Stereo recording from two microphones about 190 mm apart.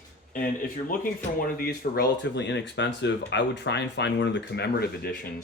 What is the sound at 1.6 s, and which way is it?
Speech, 60° left (ahead or behind).